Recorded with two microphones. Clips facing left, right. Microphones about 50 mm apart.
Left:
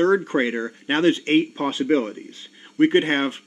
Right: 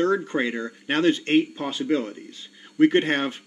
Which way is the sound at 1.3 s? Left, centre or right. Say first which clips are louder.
Left 2 dB; left.